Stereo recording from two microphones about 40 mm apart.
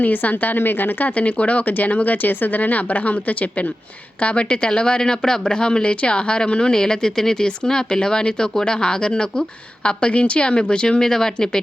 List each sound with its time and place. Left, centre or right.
0.0 s a woman's voice: left
1.0 s speech: left; by 11.6 s centre